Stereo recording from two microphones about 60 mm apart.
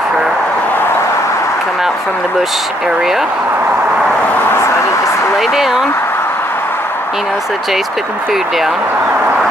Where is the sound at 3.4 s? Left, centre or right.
Right.